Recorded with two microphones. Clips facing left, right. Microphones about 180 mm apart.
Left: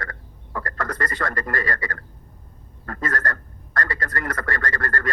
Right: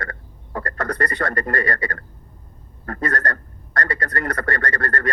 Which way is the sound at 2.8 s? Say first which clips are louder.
Right 3 dB; 40° right (ahead or behind).